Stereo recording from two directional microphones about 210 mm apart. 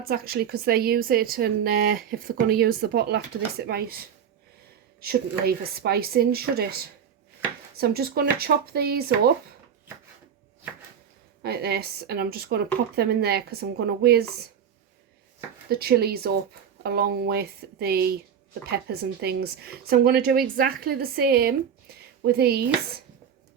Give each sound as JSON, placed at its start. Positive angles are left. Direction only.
{"t": 0.0, "sound": "a woman's voice", "side_deg": -45}
{"t": 7.8, "sound": "a woman's voice", "side_deg": -50}
{"t": 11.4, "sound": "a woman's voice", "side_deg": -50}
{"t": 15.7, "sound": "a woman's voice", "side_deg": -50}